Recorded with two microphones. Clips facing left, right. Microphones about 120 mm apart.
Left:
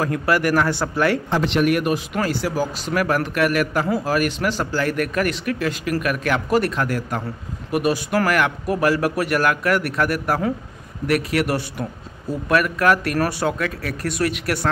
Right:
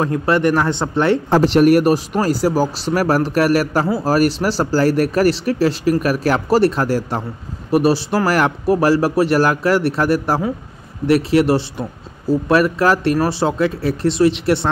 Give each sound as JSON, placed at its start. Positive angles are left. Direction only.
{"t": 0.0, "sound": "speech", "side_deg": -25}
{"t": 1.3, "sound": "speech", "side_deg": -40}